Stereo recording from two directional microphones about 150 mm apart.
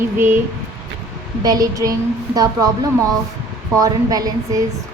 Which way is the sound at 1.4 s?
25° right (ahead or behind).